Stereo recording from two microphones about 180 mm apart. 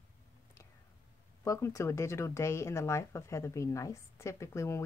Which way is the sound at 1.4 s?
15° left (ahead or behind).